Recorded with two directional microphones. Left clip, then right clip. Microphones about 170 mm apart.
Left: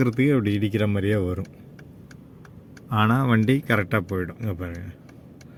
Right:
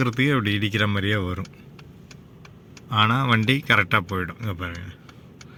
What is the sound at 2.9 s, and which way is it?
Speech, 35° left (ahead or behind).